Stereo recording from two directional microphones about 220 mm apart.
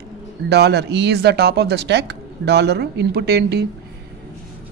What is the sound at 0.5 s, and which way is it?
Speech, 50° right (ahead or behind).